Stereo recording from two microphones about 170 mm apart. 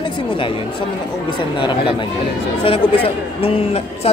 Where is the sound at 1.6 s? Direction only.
30° left (ahead or behind).